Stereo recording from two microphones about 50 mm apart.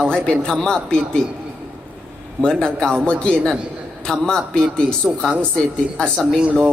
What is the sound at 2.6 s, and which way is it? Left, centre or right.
A man's voice, centre.